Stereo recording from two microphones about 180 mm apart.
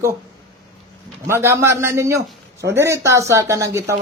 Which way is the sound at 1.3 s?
15° right (ahead or behind).